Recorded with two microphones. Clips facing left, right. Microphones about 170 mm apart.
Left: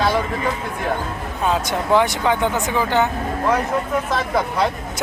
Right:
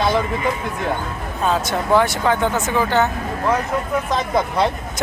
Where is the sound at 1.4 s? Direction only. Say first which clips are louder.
Right 1 dB; 15° left (ahead or behind).